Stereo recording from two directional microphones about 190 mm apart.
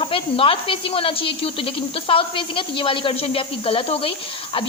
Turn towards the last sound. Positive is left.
turn(degrees=30)  # may be behind; listen again after turning